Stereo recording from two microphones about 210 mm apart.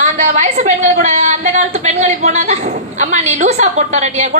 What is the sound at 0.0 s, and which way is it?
A woman's voice, 35° right (ahead or behind).